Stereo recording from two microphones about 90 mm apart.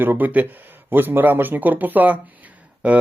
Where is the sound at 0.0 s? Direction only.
20° right (ahead or behind).